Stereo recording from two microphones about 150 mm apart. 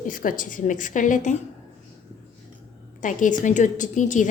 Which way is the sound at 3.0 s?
60° left (ahead or behind).